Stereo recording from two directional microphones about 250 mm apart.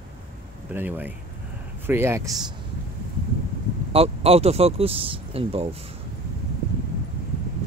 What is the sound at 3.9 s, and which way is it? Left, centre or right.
Speech, right.